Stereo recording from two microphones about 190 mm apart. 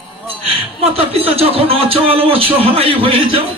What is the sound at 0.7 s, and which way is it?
Speech, 30° right (ahead or behind).